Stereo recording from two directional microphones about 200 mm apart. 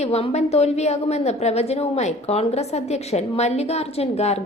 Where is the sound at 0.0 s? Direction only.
30° left (ahead or behind).